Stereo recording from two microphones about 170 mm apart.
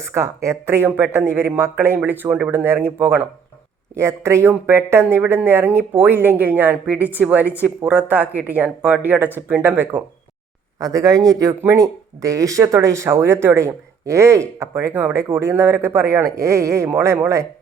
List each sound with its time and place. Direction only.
0.0 s speech: 15° right (ahead or behind)